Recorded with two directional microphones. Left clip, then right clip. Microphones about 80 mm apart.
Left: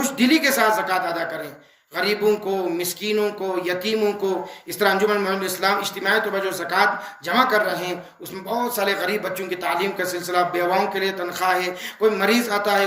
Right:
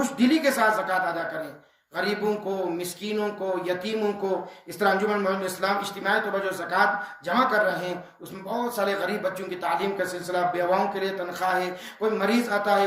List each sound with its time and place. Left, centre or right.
0.0 s speech: right